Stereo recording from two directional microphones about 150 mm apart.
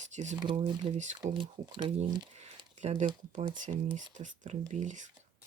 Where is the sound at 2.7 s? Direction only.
50° right (ahead or behind).